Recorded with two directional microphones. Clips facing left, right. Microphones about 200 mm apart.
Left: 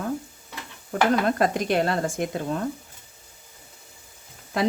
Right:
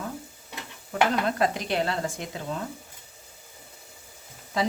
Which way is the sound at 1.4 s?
50° left (ahead or behind).